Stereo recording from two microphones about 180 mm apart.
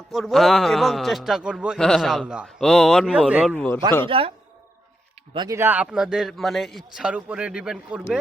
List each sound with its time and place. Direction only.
0.1 s a man's voice: centre (ahead or behind)
3.5 s a man's voice: 10° left (ahead or behind)
4.0 s a man's voice: 30° right (ahead or behind)
5.3 s speech: 25° right (ahead or behind)
5.5 s a man's voice: 10° right (ahead or behind)